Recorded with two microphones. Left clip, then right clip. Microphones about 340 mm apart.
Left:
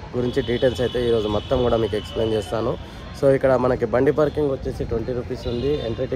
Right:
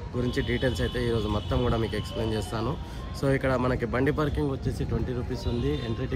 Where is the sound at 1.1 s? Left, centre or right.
Left.